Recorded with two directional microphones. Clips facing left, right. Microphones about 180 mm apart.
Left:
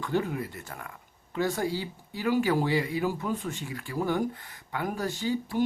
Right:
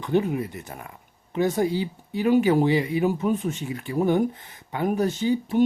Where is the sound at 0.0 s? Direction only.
20° right (ahead or behind).